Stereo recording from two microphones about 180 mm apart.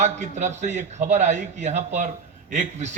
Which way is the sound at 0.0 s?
40° right (ahead or behind).